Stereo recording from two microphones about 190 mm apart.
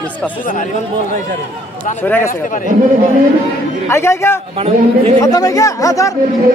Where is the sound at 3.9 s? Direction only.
15° left (ahead or behind).